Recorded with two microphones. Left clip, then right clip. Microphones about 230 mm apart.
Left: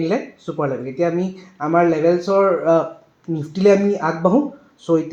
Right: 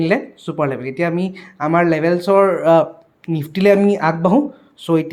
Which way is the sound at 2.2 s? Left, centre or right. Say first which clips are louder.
Right 3 dB; right.